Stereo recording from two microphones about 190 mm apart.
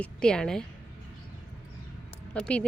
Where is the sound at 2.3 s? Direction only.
5° left (ahead or behind).